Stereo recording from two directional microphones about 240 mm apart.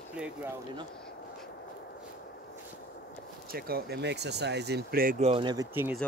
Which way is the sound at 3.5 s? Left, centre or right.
Right.